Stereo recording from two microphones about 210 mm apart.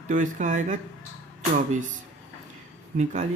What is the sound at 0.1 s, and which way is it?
Speech, 35° right (ahead or behind).